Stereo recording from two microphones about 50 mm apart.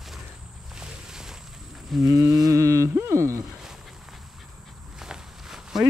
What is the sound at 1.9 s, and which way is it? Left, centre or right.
Livestock, centre.